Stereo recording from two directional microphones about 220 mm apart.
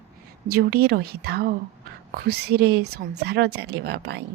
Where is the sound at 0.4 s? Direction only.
45° right (ahead or behind).